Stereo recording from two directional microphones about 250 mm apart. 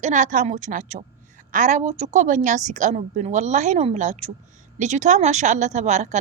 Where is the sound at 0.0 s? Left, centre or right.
Right.